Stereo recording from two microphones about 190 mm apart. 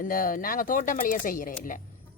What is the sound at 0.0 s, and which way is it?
Speech, 45° left (ahead or behind).